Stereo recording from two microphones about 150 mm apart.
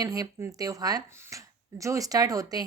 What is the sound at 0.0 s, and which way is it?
Speech, 25° right (ahead or behind).